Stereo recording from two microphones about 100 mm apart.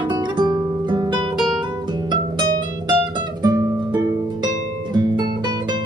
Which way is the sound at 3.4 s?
45° right (ahead or behind).